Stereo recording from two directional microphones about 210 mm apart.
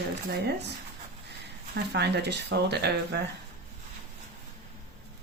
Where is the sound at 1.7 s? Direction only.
50° right (ahead or behind).